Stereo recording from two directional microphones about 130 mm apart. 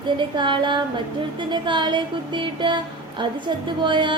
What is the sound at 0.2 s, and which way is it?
Speech, 40° right (ahead or behind).